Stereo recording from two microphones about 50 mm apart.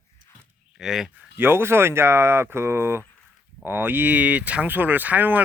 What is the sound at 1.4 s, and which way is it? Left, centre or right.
Speech, right.